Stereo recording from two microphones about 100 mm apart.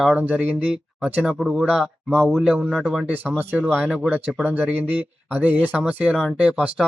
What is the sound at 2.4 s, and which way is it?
Speech, 10° right (ahead or behind).